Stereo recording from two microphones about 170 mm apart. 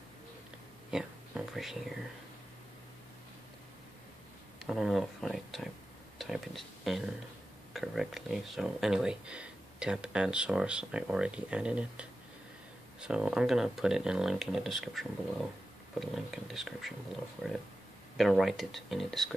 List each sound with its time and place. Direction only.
0.9 s speech: 5° right (ahead or behind)
4.6 s speech: 5° right (ahead or behind)
18.1 s speech: centre (ahead or behind)